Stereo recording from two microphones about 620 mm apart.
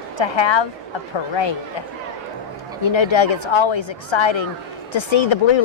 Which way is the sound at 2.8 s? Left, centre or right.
Left.